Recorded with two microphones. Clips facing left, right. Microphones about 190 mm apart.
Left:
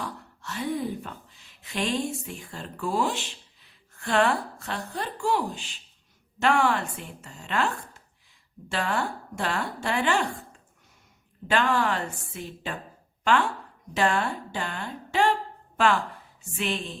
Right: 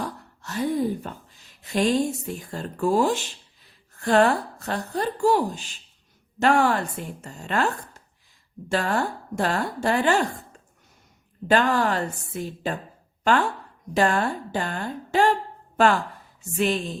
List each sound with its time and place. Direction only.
0.0 s gasp: 40° right (ahead or behind)
1.6 s speech: 40° right (ahead or behind)
8.7 s speech: 40° right (ahead or behind)
11.4 s speech: 40° right (ahead or behind)
13.9 s a woman's voice: 40° right (ahead or behind)